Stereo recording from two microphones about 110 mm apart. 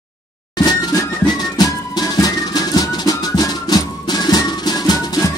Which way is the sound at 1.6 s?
35° left (ahead or behind).